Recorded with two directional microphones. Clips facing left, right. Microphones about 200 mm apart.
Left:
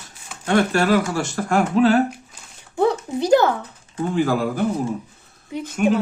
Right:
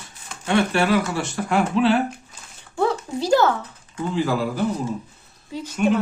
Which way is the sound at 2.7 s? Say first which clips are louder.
Left 3 dB; 20° left (ahead or behind).